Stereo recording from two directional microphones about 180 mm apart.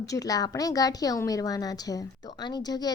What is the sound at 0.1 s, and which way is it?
A woman's voice, 20° left (ahead or behind).